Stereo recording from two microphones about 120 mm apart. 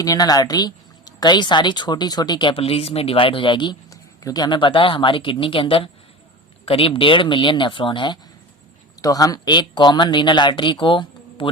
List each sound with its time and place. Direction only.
0.0 s speech: 30° left (ahead or behind)
9.0 s speech: 30° left (ahead or behind)